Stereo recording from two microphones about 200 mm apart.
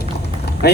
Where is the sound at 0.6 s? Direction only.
55° left (ahead or behind).